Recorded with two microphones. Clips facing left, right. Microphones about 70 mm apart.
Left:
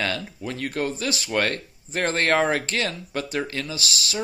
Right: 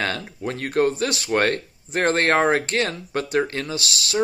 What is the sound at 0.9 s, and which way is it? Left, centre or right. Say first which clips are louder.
Speech: right 4 dB; right.